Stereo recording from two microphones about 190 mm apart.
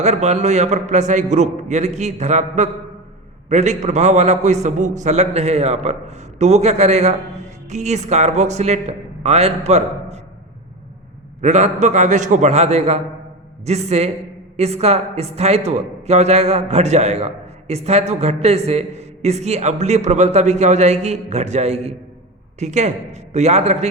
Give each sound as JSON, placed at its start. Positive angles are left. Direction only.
{"t": 0.0, "sound": "a man's voice", "side_deg": -35}
{"t": 11.3, "sound": "a man's voice", "side_deg": -40}